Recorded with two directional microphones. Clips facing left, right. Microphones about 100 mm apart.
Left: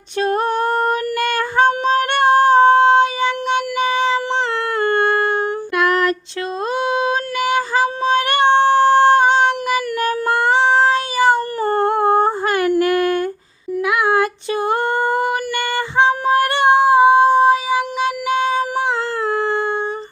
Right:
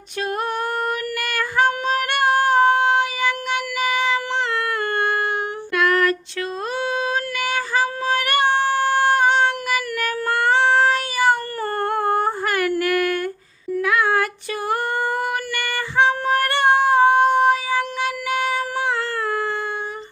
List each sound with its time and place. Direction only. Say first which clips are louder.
0.2 s female singing: left 6 dB; 30° left (ahead or behind)
4.8 s a sound: left 9 dB; 30° left (ahead or behind)
5.7 s female singing: left 1 dB; 20° left (ahead or behind)
19.2 s howl: left 5 dB; 25° left (ahead or behind)